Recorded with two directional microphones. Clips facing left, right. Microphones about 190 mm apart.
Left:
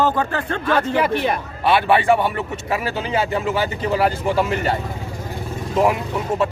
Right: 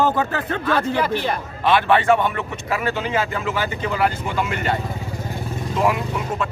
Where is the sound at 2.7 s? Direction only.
30° left (ahead or behind).